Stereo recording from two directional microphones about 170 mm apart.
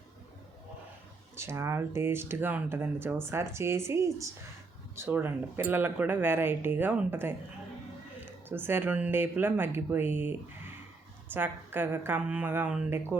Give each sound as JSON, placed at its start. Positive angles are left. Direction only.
{"t": 1.4, "sound": "speech", "side_deg": -15}